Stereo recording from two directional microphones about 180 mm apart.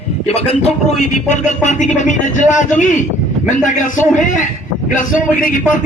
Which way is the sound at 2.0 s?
45° left (ahead or behind).